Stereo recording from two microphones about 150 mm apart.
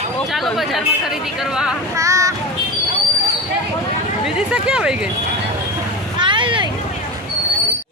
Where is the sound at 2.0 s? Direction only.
20° right (ahead or behind).